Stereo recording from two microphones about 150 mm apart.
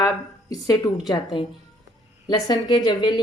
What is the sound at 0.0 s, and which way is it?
Speech, 25° left (ahead or behind).